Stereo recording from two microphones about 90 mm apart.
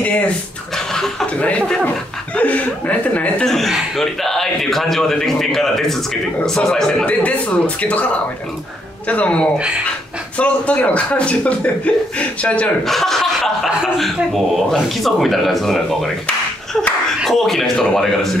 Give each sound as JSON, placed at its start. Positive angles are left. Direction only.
{"t": 0.9, "sound": "speech", "side_deg": 10}
{"t": 3.4, "sound": "a man's voice", "side_deg": 0}
{"t": 12.8, "sound": "a man's voice", "side_deg": 0}
{"t": 17.2, "sound": "a man's voice", "side_deg": 5}